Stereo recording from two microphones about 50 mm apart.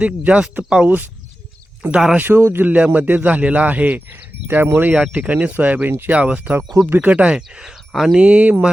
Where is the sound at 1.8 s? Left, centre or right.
Right.